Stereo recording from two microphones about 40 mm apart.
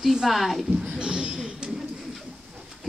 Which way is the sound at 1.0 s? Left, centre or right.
Centre.